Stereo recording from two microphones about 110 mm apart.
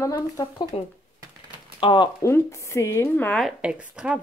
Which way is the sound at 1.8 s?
45° left (ahead or behind).